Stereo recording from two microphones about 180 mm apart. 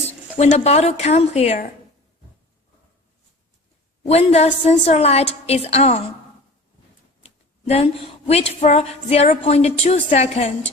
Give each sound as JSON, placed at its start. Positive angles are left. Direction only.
{"t": 0.3, "sound": "a woman's voice", "side_deg": 35}
{"t": 4.1, "sound": "a woman's voice", "side_deg": 35}
{"t": 7.2, "sound": "a woman's voice", "side_deg": 35}